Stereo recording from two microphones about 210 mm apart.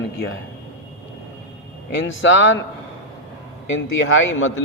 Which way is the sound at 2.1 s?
65° left (ahead or behind).